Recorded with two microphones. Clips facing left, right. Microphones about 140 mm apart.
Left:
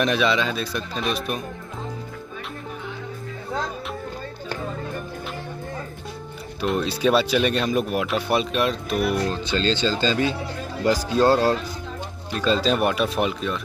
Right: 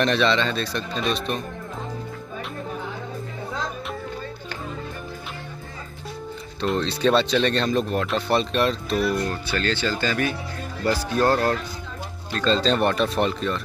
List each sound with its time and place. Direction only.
0.0 s speech: 5° left (ahead or behind)
6.6 s speech: 5° left (ahead or behind)
8.9 s speech: 65° left (ahead or behind)
9.3 s speech: 20° left (ahead or behind); by 13.6 s 5° left (ahead or behind)